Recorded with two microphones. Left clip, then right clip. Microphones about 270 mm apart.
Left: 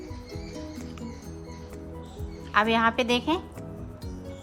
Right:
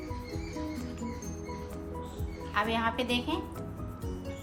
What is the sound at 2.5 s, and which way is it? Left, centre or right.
Speech, centre.